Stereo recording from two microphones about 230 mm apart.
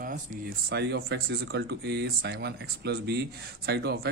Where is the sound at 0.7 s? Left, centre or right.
Right.